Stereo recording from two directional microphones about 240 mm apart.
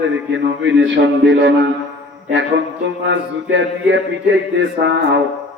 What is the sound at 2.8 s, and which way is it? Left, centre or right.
Music, right.